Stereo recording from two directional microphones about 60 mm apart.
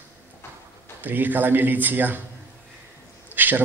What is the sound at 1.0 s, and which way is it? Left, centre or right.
A man's voice, right.